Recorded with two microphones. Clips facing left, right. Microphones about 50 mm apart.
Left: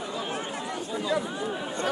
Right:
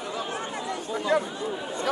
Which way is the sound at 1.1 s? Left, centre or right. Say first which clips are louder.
Right 4 dB; right.